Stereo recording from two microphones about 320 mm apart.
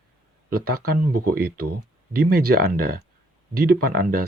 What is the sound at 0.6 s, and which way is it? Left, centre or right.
Speech, right.